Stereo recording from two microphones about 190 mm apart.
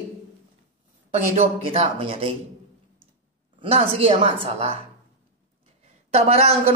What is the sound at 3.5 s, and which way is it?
Speech, 30° right (ahead or behind).